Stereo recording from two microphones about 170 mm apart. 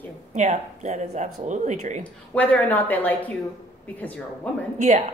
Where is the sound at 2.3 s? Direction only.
10° left (ahead or behind).